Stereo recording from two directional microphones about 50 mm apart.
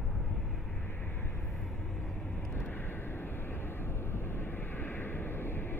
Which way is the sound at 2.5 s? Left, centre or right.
Left.